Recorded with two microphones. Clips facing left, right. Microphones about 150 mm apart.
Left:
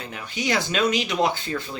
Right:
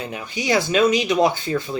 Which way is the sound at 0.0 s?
20° right (ahead or behind).